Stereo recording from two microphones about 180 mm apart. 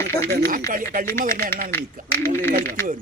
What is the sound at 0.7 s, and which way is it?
Speech, 50° right (ahead or behind).